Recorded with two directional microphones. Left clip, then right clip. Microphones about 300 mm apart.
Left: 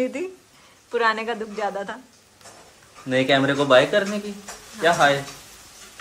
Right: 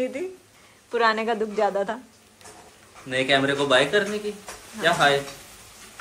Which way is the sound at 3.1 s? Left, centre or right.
Left.